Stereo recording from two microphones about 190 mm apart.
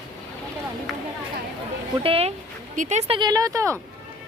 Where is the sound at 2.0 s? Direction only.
30° right (ahead or behind).